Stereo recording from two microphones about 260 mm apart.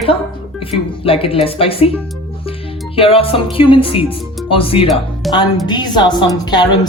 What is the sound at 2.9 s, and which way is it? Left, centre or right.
Speech, left.